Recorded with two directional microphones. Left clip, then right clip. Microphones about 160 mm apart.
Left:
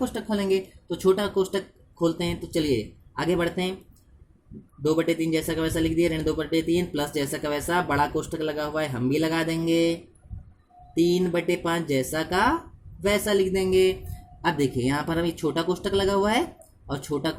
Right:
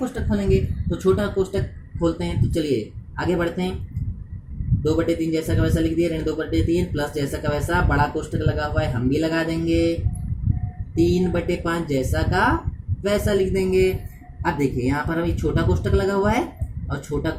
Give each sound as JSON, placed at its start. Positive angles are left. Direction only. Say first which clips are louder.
{"t": 0.0, "sound": "speech", "louder": "right 2 dB", "side_deg": 55}
{"t": 5.0, "sound": "speech", "louder": "right 2 dB", "side_deg": 55}
{"t": 11.0, "sound": "speech", "louder": "right 2 dB", "side_deg": 55}